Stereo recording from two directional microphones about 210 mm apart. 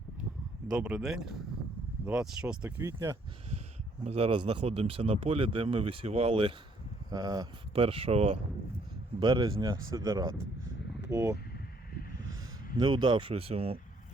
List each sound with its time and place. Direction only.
0.7 s speech: 5° right (ahead or behind)
4.0 s speech: 30° right (ahead or behind)